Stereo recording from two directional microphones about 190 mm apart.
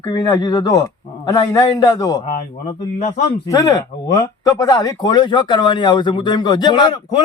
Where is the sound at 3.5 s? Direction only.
20° left (ahead or behind).